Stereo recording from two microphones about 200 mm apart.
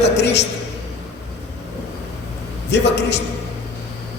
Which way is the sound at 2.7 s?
60° left (ahead or behind).